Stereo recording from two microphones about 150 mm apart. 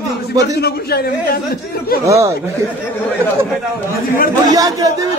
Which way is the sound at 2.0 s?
20° right (ahead or behind).